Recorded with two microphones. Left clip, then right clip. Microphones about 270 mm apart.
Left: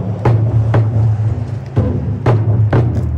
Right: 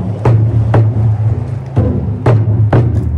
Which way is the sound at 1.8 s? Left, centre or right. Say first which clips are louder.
Right 3 dB; centre.